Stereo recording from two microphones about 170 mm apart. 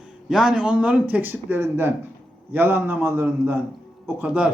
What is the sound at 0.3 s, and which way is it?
Speech, 5° right (ahead or behind).